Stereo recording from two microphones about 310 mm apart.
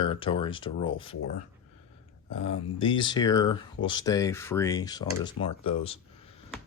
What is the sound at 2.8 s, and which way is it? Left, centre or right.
Speech, centre.